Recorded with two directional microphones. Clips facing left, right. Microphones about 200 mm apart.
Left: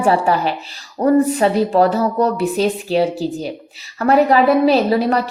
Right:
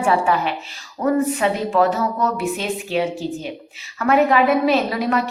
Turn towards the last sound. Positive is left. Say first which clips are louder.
# left 4 dB
turn(degrees=35)  # may be behind; listen again after turning